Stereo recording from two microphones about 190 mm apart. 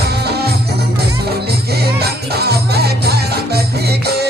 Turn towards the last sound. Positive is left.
turn(degrees=-60)  # may be behind; listen again after turning